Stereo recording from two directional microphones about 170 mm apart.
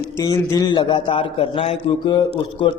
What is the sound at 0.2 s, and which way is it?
A man's voice, 20° left (ahead or behind).